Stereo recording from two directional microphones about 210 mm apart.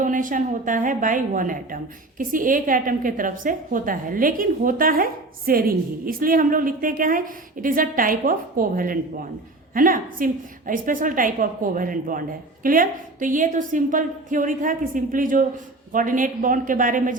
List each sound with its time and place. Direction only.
0.0 s a woman's voice: 40° right (ahead or behind)